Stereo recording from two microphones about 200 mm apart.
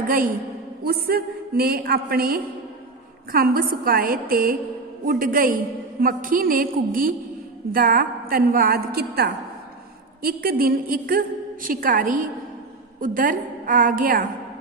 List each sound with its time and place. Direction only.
0.1 s a woman's voice: 45° right (ahead or behind)